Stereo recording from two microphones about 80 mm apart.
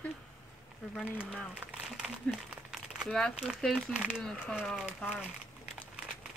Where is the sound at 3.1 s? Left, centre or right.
Centre.